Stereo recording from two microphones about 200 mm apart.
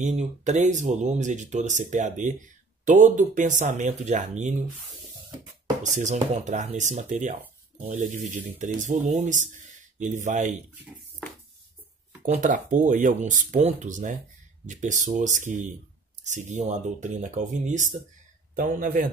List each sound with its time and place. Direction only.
0.0 s speech: 35° right (ahead or behind)
5.8 s speech: 35° right (ahead or behind)
12.3 s a man's voice: 40° right (ahead or behind)